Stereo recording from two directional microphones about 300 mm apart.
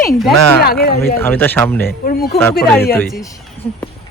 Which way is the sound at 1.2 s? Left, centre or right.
Centre.